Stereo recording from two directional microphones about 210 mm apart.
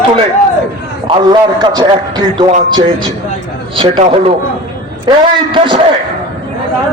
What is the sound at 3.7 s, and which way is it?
Speech, 25° right (ahead or behind).